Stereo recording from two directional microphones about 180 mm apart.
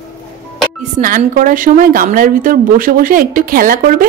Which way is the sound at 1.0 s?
50° right (ahead or behind).